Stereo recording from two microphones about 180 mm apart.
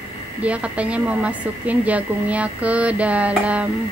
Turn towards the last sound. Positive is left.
turn(degrees=-5)  # may be behind; listen again after turning